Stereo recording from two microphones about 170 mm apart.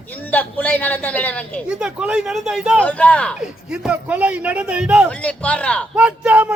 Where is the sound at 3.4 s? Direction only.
5° right (ahead or behind).